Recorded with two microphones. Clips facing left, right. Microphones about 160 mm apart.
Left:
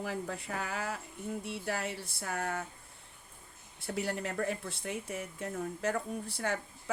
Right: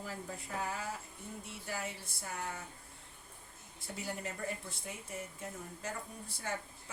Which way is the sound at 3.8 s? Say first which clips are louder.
Left 7 dB; 70° left (ahead or behind).